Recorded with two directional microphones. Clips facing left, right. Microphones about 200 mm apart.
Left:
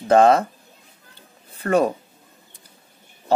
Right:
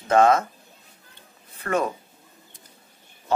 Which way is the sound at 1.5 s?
35° left (ahead or behind).